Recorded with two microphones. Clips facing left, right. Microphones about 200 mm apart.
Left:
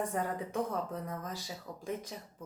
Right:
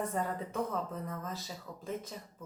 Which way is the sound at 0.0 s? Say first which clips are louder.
Even; 10° left (ahead or behind).